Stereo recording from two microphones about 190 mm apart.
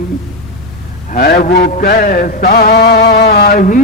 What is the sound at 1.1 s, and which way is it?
Mantra, 45° left (ahead or behind).